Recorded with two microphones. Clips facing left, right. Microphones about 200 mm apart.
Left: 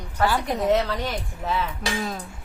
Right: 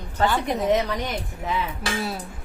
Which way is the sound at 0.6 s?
15° right (ahead or behind).